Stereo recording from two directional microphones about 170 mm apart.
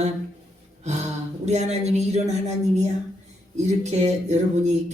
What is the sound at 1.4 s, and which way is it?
A woman's voice, 40° right (ahead or behind).